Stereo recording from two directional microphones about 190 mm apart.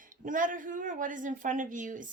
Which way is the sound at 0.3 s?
45° right (ahead or behind).